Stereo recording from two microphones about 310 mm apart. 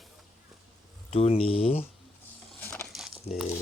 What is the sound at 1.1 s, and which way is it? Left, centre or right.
Speech, centre.